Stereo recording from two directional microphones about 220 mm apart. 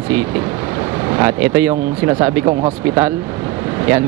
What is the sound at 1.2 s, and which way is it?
Speech, 10° right (ahead or behind).